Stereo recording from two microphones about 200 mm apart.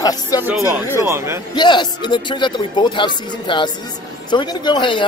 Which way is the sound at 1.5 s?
20° left (ahead or behind).